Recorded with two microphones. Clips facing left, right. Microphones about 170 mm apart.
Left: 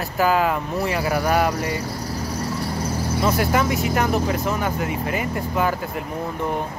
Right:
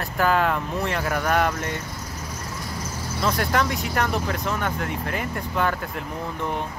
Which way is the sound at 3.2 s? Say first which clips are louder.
Left 2 dB; 5° left (ahead or behind).